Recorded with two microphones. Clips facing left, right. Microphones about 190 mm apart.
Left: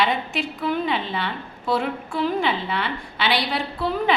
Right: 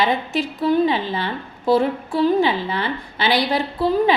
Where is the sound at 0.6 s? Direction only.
35° right (ahead or behind).